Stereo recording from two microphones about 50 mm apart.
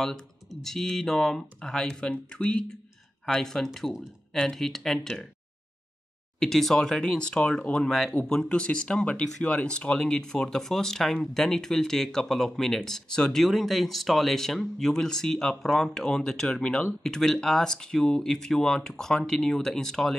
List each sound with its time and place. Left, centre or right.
0.0 s speech: centre
3.3 s speech: centre
6.4 s speech: centre
13.4 s speech: centre